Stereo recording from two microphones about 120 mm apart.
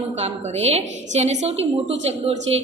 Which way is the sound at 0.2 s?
65° right (ahead or behind).